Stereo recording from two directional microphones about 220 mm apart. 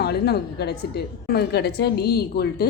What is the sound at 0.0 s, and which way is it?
A woman's voice, 45° left (ahead or behind).